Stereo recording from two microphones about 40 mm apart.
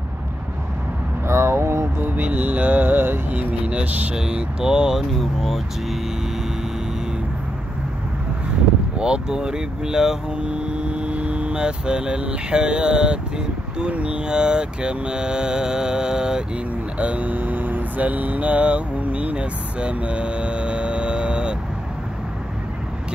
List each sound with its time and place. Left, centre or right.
1.2 s vehicle: right
2.0 s music: right
3.3 s speech: right
4.1 s mantra: right
4.9 s speech: centre
8.9 s mantra: right
10.3 s speech: right
13.7 s mantra: right
17.0 s music: right